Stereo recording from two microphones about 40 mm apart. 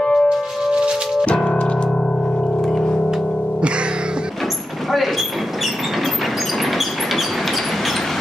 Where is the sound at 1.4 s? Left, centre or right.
Left.